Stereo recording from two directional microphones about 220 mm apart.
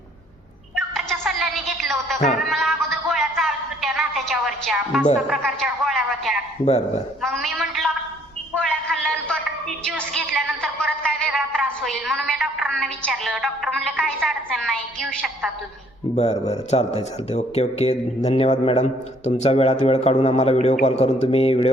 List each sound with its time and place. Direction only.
0.8 s music: centre (ahead or behind)
2.5 s a sound: centre (ahead or behind)
5.3 s a woman's voice: centre (ahead or behind)
8.5 s a sound: 5° left (ahead or behind)
11.0 s a woman's voice: centre (ahead or behind)
16.1 s a man's voice: 30° left (ahead or behind)